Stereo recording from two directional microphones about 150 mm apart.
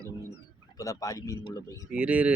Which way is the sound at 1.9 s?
10° right (ahead or behind).